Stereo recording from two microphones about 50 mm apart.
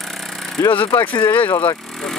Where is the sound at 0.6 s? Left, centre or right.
Left.